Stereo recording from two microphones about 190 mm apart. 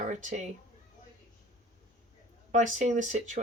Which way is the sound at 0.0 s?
40° right (ahead or behind).